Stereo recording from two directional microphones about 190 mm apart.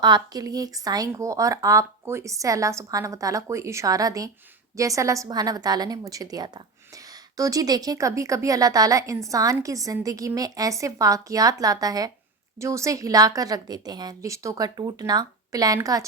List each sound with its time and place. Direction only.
0.0 s a woman's voice: 20° right (ahead or behind)